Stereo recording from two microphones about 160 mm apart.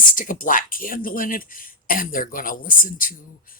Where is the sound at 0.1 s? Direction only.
55° left (ahead or behind).